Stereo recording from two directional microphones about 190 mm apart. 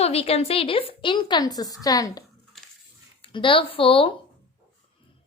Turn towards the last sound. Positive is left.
turn(degrees=30)  # may be behind; listen again after turning